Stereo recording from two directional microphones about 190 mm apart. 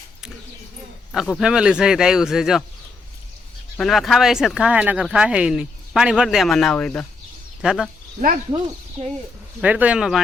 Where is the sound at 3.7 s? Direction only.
Centre (ahead or behind).